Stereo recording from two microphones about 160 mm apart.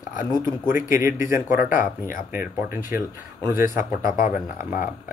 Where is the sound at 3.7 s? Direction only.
55° left (ahead or behind).